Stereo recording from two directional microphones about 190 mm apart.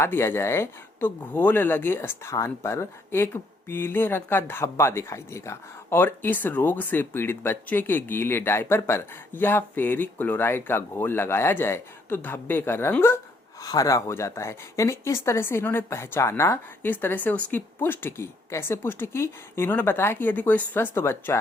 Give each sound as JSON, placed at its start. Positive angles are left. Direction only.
{"t": 0.0, "sound": "speech", "side_deg": 10}